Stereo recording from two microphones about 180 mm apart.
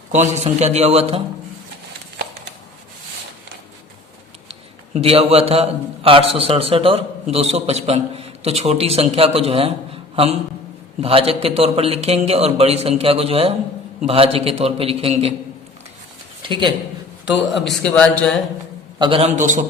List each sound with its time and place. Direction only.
0.1 s a man's voice: 40° right (ahead or behind)
4.9 s a man's voice: 35° right (ahead or behind)
11.0 s a man's voice: 30° right (ahead or behind)
16.4 s a woman's voice: 25° right (ahead or behind)
17.2 s a man's voice: centre (ahead or behind)
18.9 s a man's voice: 30° right (ahead or behind)
19.4 s a man's voice: 45° right (ahead or behind)